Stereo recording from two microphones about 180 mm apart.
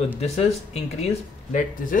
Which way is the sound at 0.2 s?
35° left (ahead or behind).